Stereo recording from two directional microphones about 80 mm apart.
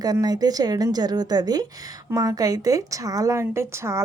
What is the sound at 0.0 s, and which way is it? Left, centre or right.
A woman's voice, right.